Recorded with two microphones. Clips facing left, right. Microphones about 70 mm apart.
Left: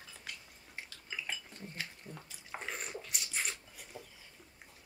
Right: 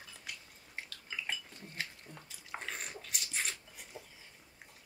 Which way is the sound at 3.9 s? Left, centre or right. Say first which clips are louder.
Left 1 dB; centre.